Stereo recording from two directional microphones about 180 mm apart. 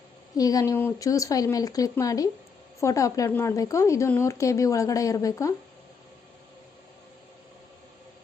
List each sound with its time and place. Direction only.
0.3 s a woman's voice: 20° left (ahead or behind)